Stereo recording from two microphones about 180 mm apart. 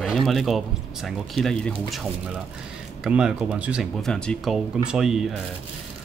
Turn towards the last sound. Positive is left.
turn(degrees=-5)  # may be behind; listen again after turning